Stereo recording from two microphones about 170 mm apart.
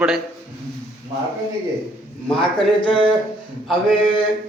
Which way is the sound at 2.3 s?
30° left (ahead or behind).